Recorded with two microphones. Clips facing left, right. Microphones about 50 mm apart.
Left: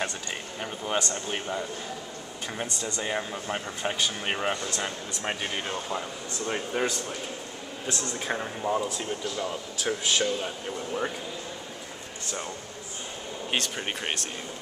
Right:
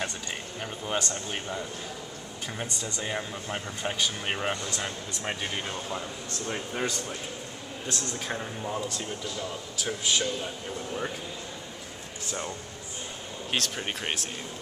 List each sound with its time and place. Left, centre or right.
0.6 s speech: centre
13.5 s speech: centre